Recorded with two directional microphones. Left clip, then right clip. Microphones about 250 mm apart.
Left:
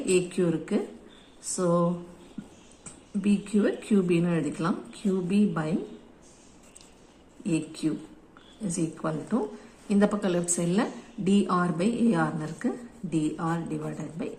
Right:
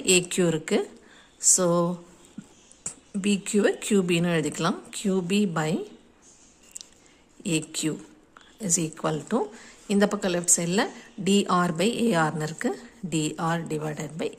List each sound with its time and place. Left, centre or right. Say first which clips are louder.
0.1 s a woman's voice: right 3 dB; right
3.2 s a woman's voice: right 3 dB; right
7.4 s a woman's voice: right 1 dB; right